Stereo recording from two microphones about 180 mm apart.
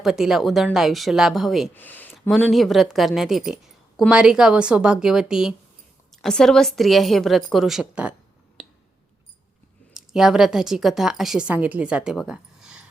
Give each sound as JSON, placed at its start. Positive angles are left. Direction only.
{"t": 0.0, "sound": "a woman's voice", "side_deg": 0}
{"t": 1.7, "sound": "a woman's voice", "side_deg": 10}
{"t": 9.9, "sound": "speech", "side_deg": -5}